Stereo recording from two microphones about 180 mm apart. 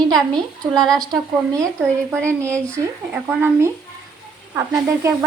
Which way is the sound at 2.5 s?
5° left (ahead or behind).